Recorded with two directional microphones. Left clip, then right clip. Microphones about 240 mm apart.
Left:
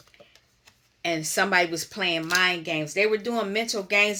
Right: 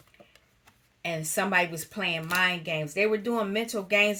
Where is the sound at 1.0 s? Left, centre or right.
Left.